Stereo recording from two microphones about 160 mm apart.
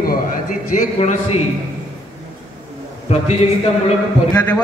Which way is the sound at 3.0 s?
40° left (ahead or behind).